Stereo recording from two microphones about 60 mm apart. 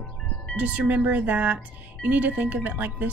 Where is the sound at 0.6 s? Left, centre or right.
Right.